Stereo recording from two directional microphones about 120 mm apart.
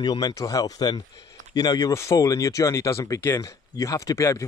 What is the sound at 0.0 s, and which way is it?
Speech, 35° left (ahead or behind).